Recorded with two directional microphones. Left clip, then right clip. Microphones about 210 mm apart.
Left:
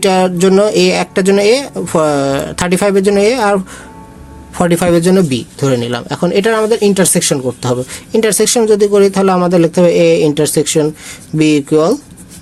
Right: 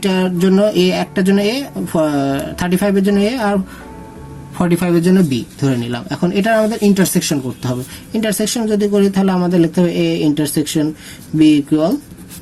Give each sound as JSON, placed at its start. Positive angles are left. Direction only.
{"t": 0.0, "sound": "speech", "side_deg": 50}